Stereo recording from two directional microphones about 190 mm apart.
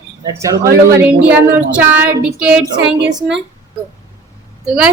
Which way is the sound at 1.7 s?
10° right (ahead or behind).